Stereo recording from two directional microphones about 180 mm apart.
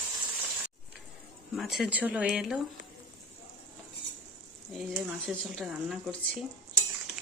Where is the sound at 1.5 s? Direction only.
Centre (ahead or behind).